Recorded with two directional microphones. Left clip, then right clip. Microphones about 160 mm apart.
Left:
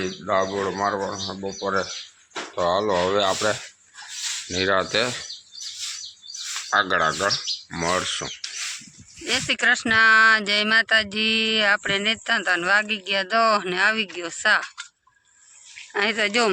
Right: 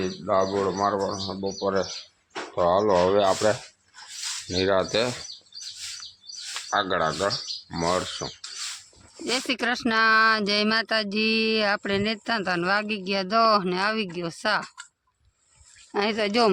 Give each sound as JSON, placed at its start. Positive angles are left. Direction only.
{"t": 0.0, "sound": "speech", "side_deg": -5}
{"t": 2.6, "sound": "speech", "side_deg": -15}
{"t": 6.7, "sound": "speech", "side_deg": -5}
{"t": 15.9, "sound": "speech", "side_deg": 0}